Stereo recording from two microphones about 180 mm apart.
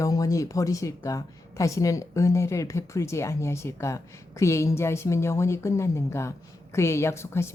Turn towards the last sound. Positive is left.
turn(degrees=15)  # may be behind; listen again after turning